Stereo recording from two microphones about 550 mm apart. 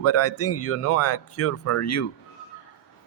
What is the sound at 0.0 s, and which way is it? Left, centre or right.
A man's voice, left.